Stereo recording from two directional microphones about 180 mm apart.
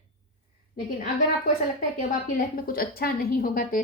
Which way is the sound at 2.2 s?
50° left (ahead or behind).